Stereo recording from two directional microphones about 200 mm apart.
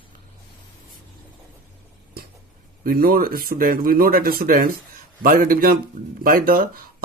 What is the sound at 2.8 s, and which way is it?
Speech, 45° right (ahead or behind).